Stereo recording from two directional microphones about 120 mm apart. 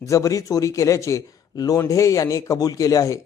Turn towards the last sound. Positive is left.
turn(degrees=30)  # may be behind; listen again after turning